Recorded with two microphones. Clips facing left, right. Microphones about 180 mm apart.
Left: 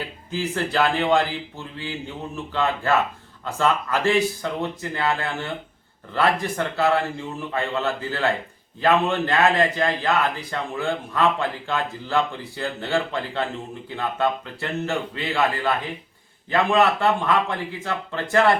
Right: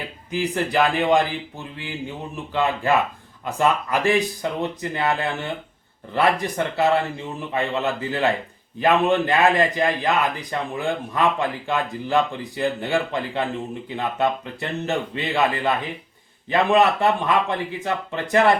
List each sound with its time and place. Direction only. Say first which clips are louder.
0.3 s a man's voice: right 3 dB; 15° right (ahead or behind)